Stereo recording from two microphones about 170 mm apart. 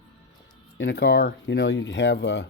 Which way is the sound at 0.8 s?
85° left.